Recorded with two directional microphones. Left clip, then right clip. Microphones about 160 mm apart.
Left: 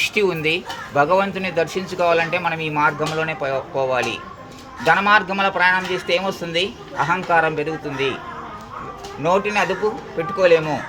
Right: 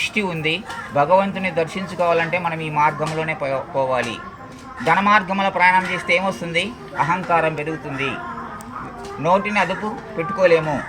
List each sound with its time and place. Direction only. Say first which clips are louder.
0.0 s speech: left 3 dB; 40° left (ahead or behind)
9.3 s speech: right 1 dB; 40° left (ahead or behind)